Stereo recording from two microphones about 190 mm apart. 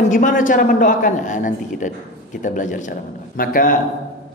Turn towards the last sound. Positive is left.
turn(degrees=45)  # may be behind; listen again after turning